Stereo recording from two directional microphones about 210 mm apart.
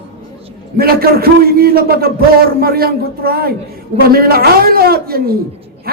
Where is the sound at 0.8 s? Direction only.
45° right (ahead or behind).